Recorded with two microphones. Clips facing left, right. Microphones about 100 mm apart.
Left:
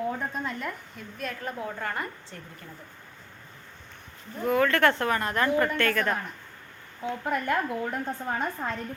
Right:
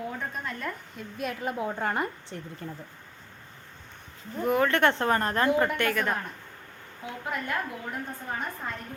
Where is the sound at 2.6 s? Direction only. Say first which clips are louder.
Right 7 dB; 40° right (ahead or behind).